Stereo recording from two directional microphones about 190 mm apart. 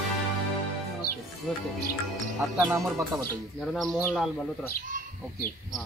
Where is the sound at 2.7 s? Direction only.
15° right (ahead or behind).